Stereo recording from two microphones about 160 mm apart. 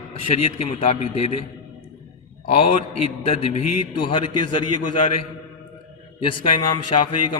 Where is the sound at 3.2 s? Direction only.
40° left (ahead or behind).